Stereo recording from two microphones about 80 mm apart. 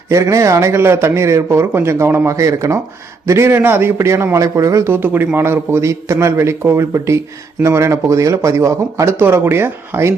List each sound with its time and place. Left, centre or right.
0.1 s speech: right
4.9 s speech: right